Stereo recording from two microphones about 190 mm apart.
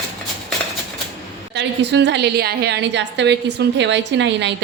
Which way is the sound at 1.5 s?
65° right (ahead or behind).